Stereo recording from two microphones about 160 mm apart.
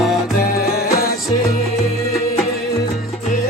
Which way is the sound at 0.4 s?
70° left (ahead or behind).